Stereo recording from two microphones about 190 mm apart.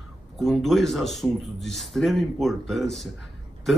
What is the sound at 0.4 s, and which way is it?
Speech, centre (ahead or behind).